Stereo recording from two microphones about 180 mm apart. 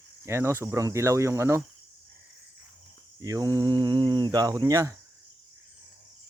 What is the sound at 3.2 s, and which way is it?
Speech, 20° right (ahead or behind).